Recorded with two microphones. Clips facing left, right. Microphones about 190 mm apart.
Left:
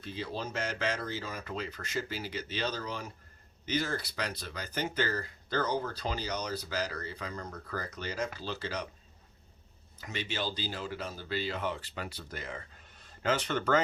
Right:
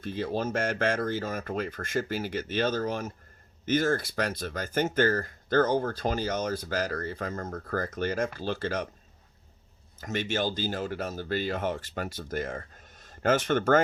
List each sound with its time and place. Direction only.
0.0 s speech: 50° right (ahead or behind)
10.0 s speech: 50° right (ahead or behind)